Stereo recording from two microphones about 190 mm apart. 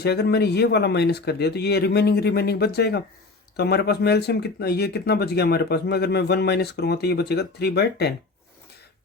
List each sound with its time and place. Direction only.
0.0 s speech: 60° left (ahead or behind)